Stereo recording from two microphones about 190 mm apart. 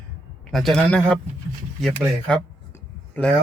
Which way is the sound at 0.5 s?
Centre (ahead or behind).